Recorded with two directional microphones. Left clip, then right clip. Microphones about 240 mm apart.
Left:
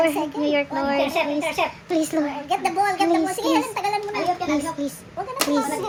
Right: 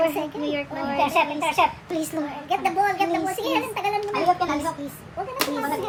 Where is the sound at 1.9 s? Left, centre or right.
Centre.